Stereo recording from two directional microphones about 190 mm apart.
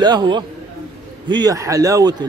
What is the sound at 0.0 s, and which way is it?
Speech, 20° right (ahead or behind).